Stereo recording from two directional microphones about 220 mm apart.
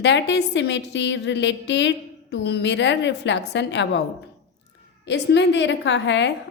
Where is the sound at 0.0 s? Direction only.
50° left (ahead or behind).